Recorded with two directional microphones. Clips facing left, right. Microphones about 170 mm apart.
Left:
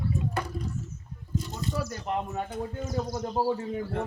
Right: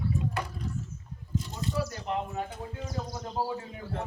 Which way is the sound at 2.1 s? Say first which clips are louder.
Left 3 dB; 45° left (ahead or behind).